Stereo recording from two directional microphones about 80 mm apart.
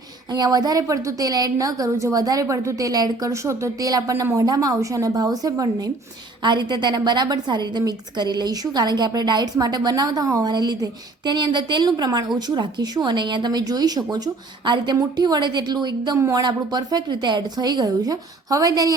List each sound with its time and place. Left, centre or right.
0.3 s a woman's voice: right
6.4 s a woman's voice: right
11.3 s a woman's voice: right
14.6 s a woman's voice: right